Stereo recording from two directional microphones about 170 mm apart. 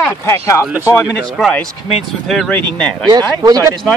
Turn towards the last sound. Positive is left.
turn(degrees=-20)  # may be behind; listen again after turning